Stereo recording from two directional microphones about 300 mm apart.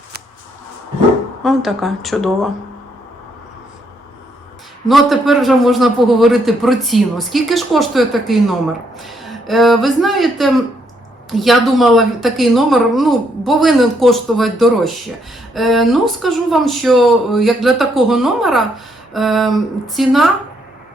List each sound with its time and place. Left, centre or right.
1.5 s speech: centre
4.9 s speech: centre